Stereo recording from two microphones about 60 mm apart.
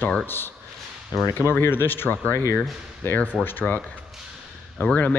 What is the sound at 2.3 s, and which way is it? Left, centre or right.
Speech, left.